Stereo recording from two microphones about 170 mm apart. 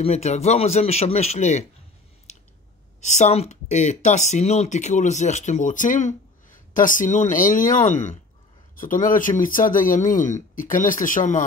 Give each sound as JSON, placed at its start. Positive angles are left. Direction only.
{"t": 0.0, "sound": "a man's voice", "side_deg": 40}
{"t": 3.0, "sound": "speech", "side_deg": 45}